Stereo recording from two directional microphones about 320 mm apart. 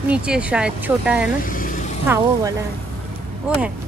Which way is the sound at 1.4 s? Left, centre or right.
Left.